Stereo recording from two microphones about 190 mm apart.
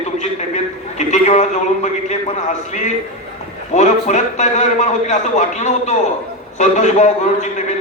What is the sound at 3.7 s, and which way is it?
A man's voice, 40° left (ahead or behind).